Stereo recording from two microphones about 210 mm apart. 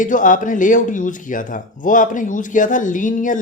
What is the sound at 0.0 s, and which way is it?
Speech, 40° left (ahead or behind).